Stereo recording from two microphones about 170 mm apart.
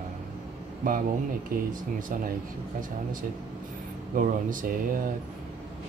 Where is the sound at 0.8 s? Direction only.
55° right (ahead or behind).